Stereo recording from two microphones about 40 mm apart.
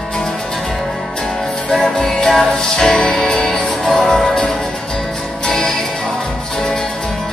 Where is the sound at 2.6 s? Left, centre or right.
Centre.